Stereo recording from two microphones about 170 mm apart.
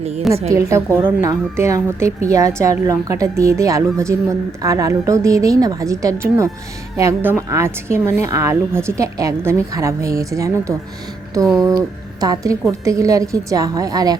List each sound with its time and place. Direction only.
0.3 s a woman's voice: centre (ahead or behind)
0.7 s a woman's voice: 15° right (ahead or behind)
12.2 s a woman's voice: 20° right (ahead or behind)